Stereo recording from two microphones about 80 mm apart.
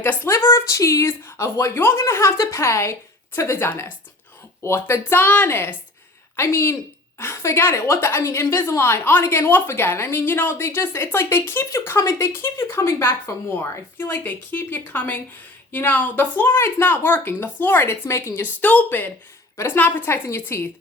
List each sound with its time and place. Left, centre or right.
0.3 s a woman's voice: left
18.4 s a woman's voice: left